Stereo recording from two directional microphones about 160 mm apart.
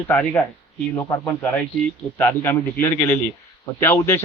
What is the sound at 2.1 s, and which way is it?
A man's voice, 15° left (ahead or behind).